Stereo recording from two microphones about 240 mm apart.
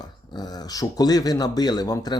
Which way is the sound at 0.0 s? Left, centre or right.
Centre.